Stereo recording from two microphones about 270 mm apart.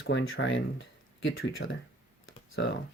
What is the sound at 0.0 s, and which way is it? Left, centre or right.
Speech, left.